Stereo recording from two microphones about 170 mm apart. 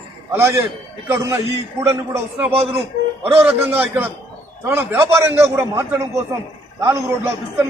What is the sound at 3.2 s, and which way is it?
A man's voice, 10° right (ahead or behind).